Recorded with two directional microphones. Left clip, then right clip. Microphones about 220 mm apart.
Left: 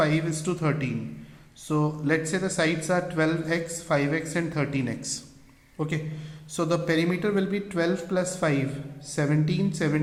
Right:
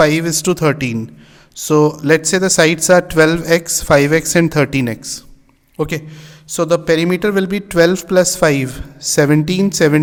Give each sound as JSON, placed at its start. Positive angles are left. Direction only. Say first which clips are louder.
{"t": 0.0, "sound": "speech", "louder": "right 12 dB", "side_deg": -55}